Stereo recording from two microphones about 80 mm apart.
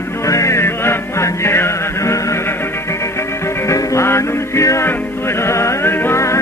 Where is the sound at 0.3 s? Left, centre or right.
Left.